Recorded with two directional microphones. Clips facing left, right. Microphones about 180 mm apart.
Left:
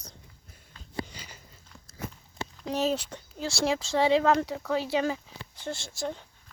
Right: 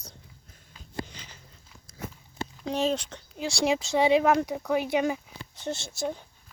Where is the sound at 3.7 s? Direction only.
15° right (ahead or behind).